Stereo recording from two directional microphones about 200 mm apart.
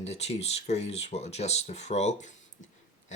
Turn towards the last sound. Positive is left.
turn(degrees=35)  # may be behind; listen again after turning